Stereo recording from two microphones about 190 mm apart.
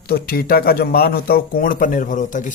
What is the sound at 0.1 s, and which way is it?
Speech, 55° left (ahead or behind).